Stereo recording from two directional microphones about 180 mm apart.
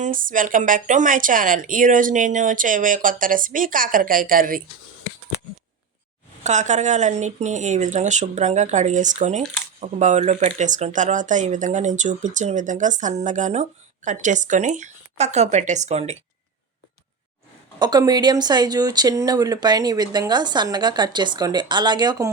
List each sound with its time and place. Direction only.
0.0 s speech: 50° right (ahead or behind)
6.4 s speech: 40° right (ahead or behind)
17.7 s speech: 25° right (ahead or behind)